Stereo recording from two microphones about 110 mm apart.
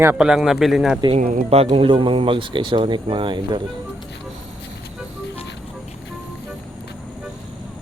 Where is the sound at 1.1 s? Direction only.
70° right (ahead or behind); by 3.6 s 50° right (ahead or behind).